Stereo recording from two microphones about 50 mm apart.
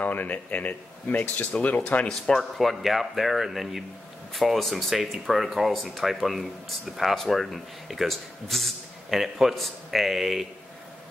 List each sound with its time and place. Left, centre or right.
0.0 s speech: left
2.0 s a man's voice: centre